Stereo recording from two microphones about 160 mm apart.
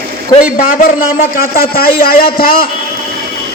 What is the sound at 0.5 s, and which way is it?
A man's voice, 60° left (ahead or behind).